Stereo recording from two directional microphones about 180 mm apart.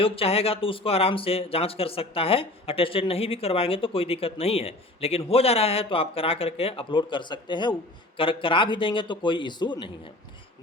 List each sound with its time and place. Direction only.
0.0 s a man's voice: 30° left (ahead or behind)